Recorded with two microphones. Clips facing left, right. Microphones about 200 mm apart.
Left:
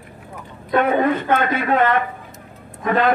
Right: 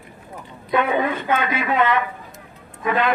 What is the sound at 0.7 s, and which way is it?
Speech, 50° left (ahead or behind).